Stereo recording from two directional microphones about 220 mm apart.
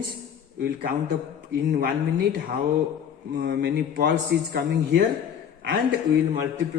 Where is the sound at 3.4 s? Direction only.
45° right (ahead or behind).